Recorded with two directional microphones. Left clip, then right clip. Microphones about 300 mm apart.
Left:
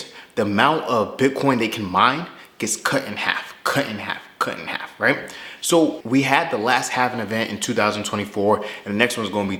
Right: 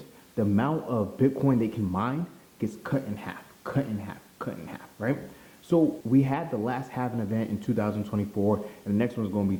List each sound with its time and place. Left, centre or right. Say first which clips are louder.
0.3 s speech: left 10 dB; centre